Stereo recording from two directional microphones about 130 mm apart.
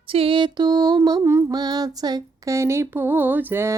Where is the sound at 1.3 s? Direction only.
25° right (ahead or behind).